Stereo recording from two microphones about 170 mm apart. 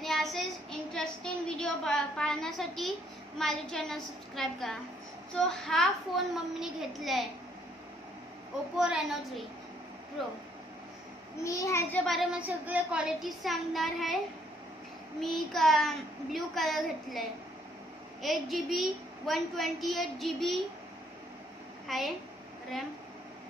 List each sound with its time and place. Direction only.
0.0 s a child's voice: centre (ahead or behind)
8.7 s a child's voice: 5° right (ahead or behind)
11.4 s a child's voice: 20° left (ahead or behind)
12.0 s a child's voice: centre (ahead or behind)
21.8 s a woman's voice: centre (ahead or behind)